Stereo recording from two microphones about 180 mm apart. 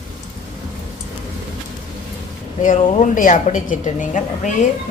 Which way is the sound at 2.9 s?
45° left (ahead or behind).